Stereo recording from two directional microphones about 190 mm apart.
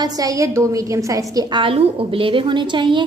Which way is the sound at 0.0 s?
20° right (ahead or behind).